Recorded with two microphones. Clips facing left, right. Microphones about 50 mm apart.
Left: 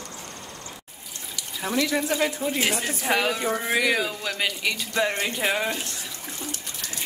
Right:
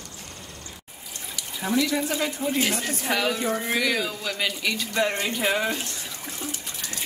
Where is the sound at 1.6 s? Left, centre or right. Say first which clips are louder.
Even; centre.